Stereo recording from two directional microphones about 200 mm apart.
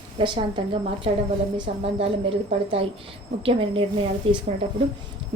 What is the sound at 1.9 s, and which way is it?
A woman's voice, 30° right (ahead or behind).